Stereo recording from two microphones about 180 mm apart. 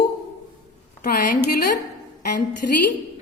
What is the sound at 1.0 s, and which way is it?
Speech, 50° left (ahead or behind).